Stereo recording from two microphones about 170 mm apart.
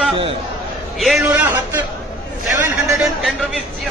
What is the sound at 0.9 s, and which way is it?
Speech, centre (ahead or behind).